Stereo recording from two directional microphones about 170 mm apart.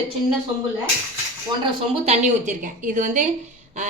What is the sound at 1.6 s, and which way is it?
A woman's voice, 40° right (ahead or behind).